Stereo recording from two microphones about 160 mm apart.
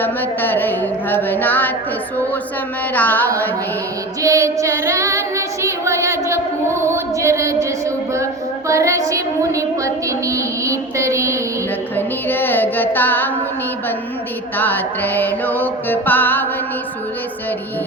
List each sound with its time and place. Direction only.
0.0 s a sound: 10° left (ahead or behind)
2.9 s music: 10° left (ahead or behind)
4.2 s child singing: 20° right (ahead or behind)
11.9 s music: 10° left (ahead or behind)
14.5 s music: 10° left (ahead or behind)